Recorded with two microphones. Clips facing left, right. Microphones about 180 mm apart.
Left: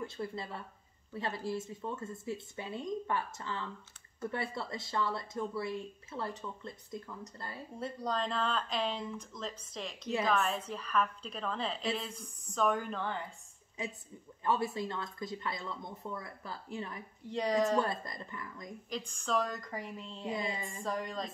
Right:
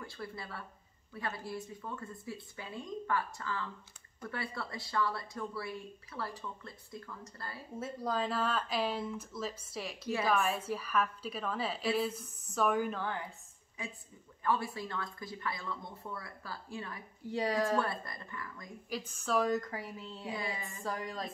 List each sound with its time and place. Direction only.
0.0 s speech: 20° left (ahead or behind)
7.8 s a woman's voice: 5° right (ahead or behind)
13.8 s speech: 20° left (ahead or behind)
17.3 s a woman's voice: 5° right (ahead or behind)
17.7 s speech: 20° left (ahead or behind)
18.9 s a woman's voice: 5° right (ahead or behind)
20.3 s speech: 20° left (ahead or behind)
20.8 s a woman's voice: centre (ahead or behind)